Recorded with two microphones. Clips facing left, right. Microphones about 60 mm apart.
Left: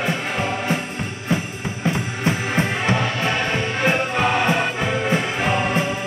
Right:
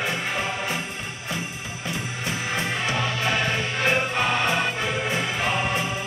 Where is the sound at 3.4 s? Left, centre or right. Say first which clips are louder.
Left 3 dB; centre.